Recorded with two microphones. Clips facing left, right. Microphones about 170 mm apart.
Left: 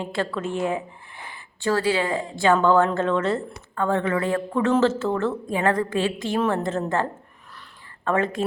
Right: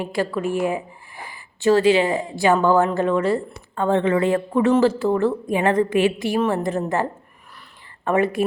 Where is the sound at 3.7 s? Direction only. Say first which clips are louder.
Right 4 dB; 25° right (ahead or behind).